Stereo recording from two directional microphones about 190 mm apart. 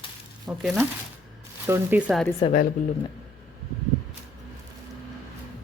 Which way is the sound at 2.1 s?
Centre (ahead or behind).